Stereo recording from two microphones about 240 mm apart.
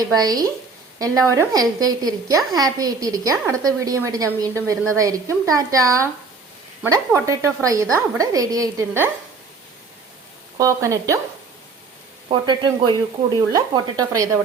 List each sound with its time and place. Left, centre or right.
0.0 s a woman's voice: centre
10.6 s a woman's voice: centre
12.5 s a woman's voice: centre